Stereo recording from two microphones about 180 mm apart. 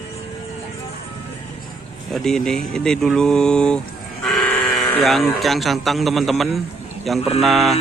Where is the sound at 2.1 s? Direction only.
5° left (ahead or behind).